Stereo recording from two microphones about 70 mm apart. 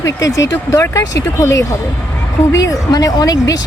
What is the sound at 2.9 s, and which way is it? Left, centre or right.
Speech, left.